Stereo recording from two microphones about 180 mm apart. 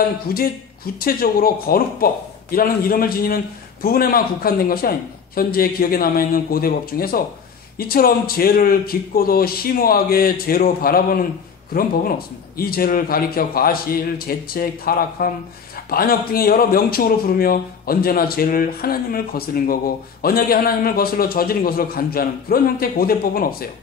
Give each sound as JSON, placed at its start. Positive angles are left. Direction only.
{"t": 0.3, "sound": "a man's voice", "side_deg": 55}
{"t": 12.5, "sound": "a man's voice", "side_deg": 55}